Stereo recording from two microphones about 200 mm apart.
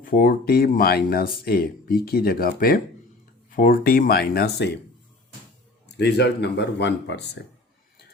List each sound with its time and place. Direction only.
0.0 s speech: 45° left (ahead or behind)
6.0 s speech: 55° left (ahead or behind)